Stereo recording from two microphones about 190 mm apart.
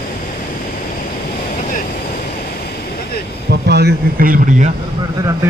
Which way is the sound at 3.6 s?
60° right (ahead or behind).